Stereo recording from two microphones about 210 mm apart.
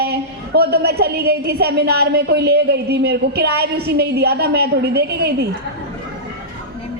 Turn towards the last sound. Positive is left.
turn(degrees=-50)  # may be behind; listen again after turning